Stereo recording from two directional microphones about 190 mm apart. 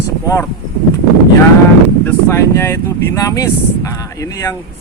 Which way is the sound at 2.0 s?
15° left (ahead or behind).